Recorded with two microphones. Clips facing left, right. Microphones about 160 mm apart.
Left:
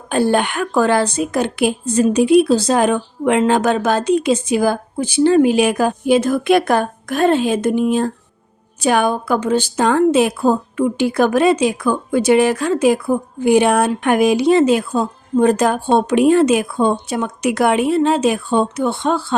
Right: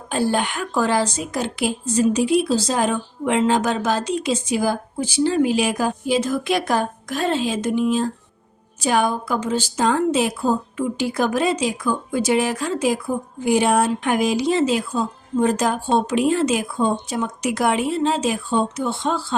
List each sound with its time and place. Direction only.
0.1 s a woman's voice: 60° left (ahead or behind)